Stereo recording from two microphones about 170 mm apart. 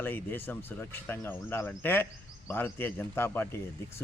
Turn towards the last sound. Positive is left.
turn(degrees=15)  # may be behind; listen again after turning